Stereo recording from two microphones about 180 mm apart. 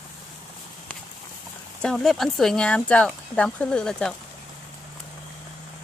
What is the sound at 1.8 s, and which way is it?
Speech, centre (ahead or behind).